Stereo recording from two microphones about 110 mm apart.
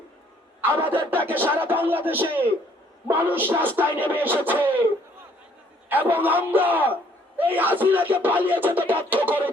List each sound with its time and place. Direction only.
0.6 s a man's voice: 15° right (ahead or behind)
5.9 s a man's voice: 15° right (ahead or behind)